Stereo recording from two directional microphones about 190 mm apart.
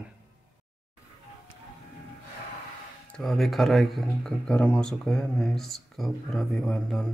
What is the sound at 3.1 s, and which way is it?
Speech, centre (ahead or behind).